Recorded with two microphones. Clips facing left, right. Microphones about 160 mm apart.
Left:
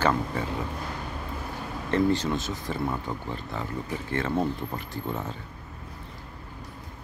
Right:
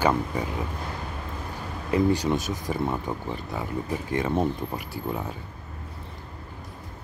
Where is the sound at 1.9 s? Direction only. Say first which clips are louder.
Right 2 dB; 15° right (ahead or behind).